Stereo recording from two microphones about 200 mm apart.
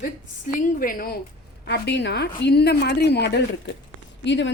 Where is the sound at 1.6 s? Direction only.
60° left (ahead or behind).